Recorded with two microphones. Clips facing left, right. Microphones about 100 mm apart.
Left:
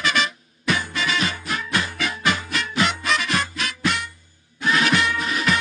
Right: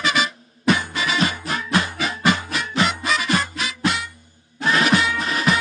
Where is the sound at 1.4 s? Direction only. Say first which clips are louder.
Right 3 dB; 35° right (ahead or behind).